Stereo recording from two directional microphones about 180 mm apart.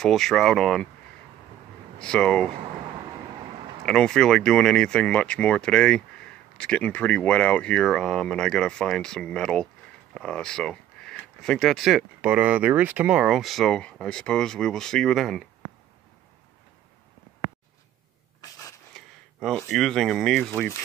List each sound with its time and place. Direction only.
0.0 s speech: centre (ahead or behind)
2.0 s speech: 5° left (ahead or behind)
3.8 s speech: 5° left (ahead or behind)
18.4 s a sound: 20° left (ahead or behind)
19.7 s speech: centre (ahead or behind)